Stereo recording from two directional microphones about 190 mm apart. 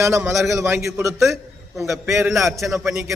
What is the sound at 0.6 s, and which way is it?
A man's voice, 15° right (ahead or behind).